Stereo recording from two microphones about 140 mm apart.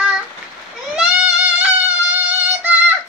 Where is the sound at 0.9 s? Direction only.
5° right (ahead or behind).